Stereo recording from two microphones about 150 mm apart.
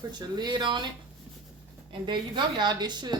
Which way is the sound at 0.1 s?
30° right (ahead or behind).